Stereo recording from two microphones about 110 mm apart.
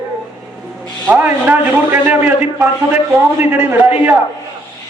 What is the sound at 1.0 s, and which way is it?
A man's voice, 15° right (ahead or behind).